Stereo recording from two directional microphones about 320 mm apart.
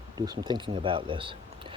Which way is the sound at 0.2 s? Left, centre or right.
Centre.